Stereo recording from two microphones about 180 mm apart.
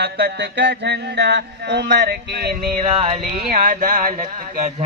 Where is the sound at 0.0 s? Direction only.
65° right (ahead or behind).